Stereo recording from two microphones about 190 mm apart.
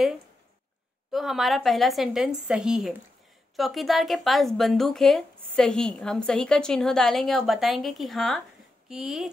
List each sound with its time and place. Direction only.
1.1 s speech: centre (ahead or behind)